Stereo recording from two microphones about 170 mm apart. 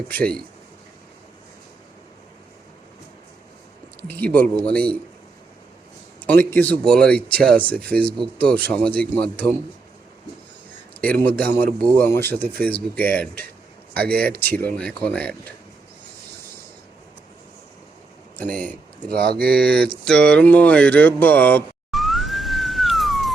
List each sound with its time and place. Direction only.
0.1 s speech: 10° left (ahead or behind)
4.0 s speech: 10° left (ahead or behind)
6.2 s speech: 10° left (ahead or behind)
11.0 s speech: 10° left (ahead or behind)
18.3 s speech: 10° left (ahead or behind)
20.1 s a sound: 5° left (ahead or behind)